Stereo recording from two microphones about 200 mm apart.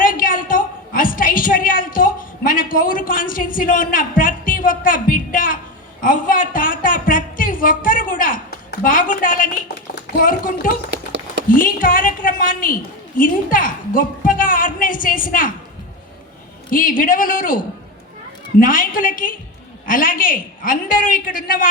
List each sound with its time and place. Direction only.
0.0 s a sound: 45° left (ahead or behind)
8.8 s a woman's voice: 45° left (ahead or behind)
10.9 s a sound: 65° right (ahead or behind)
11.4 s a woman's voice: 45° left (ahead or behind)
16.6 s a woman's voice: 45° left (ahead or behind)
18.6 s a woman's voice: 45° left (ahead or behind)